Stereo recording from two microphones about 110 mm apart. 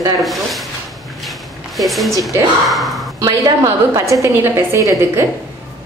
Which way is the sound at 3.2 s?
30° right (ahead or behind).